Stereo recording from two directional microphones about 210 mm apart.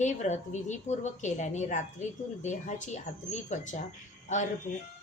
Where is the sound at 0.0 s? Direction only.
35° left (ahead or behind).